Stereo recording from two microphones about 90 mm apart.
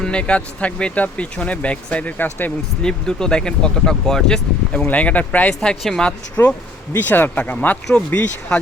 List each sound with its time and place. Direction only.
0.0 s speech: 10° left (ahead or behind)
2.8 s speech: 10° left (ahead or behind)